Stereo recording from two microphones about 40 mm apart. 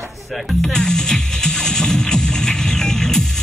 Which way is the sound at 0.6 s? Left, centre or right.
Centre.